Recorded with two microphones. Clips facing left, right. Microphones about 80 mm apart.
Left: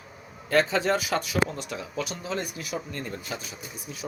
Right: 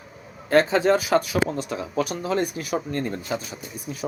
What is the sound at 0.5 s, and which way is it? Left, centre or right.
Speech, right.